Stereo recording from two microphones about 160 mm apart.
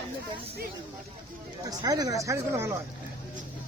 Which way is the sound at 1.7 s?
25° right (ahead or behind).